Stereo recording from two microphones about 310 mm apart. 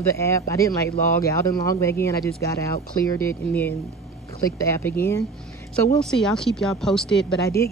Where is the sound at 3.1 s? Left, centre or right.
Centre.